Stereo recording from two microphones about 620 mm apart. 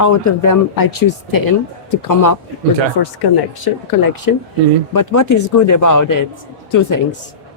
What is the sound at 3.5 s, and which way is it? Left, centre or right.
Speech, left.